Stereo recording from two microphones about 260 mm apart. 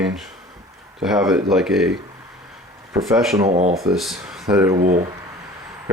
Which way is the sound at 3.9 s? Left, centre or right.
Centre.